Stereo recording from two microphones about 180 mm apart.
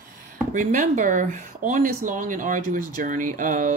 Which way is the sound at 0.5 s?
45° right (ahead or behind).